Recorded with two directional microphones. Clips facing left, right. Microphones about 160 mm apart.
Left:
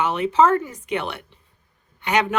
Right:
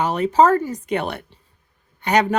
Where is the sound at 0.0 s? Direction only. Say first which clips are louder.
Right 2 dB; 40° right (ahead or behind).